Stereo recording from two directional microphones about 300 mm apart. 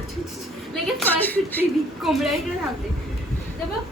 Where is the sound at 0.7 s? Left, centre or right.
Centre.